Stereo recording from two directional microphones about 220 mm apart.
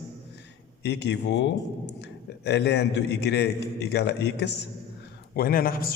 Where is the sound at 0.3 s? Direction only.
50° left (ahead or behind).